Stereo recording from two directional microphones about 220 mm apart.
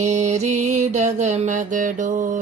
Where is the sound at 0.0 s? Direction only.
30° right (ahead or behind).